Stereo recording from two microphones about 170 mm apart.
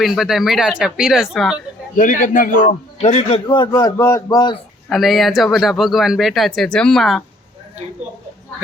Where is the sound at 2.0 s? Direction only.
50° left (ahead or behind).